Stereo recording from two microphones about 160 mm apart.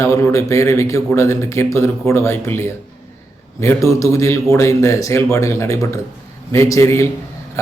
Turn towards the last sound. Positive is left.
turn(degrees=15)  # may be behind; listen again after turning